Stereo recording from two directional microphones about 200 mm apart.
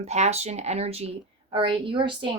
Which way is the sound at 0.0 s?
35° right (ahead or behind).